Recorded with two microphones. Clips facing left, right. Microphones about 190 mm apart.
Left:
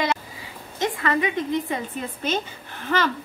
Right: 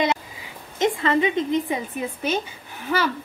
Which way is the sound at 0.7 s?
25° right (ahead or behind).